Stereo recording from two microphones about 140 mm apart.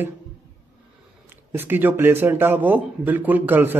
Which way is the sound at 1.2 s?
15° right (ahead or behind).